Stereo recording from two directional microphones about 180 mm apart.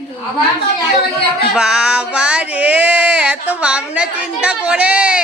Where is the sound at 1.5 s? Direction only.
5° right (ahead or behind).